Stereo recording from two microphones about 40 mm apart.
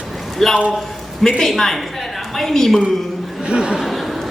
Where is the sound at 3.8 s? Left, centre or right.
Centre.